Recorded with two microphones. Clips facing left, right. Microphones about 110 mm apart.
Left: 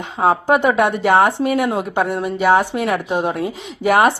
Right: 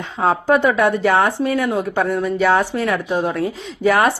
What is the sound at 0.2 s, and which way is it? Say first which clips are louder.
A woman's voice: left 1 dB; 15° left (ahead or behind).